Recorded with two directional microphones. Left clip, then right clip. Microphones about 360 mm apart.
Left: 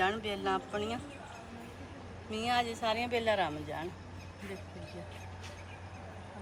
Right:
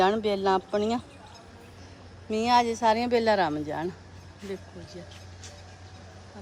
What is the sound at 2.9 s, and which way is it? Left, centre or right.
Speech, right.